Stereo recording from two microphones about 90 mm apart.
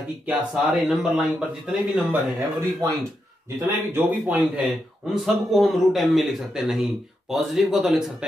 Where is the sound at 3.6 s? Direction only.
25° right (ahead or behind).